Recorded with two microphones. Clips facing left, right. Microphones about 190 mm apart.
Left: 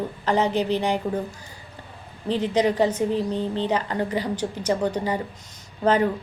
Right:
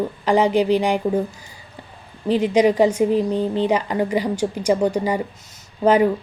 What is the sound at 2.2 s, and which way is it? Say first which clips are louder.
A woman's voice: right 5 dB; 10° right (ahead or behind).